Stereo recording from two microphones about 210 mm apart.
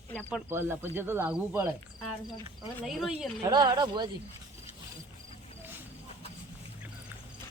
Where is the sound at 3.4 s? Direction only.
20° right (ahead or behind).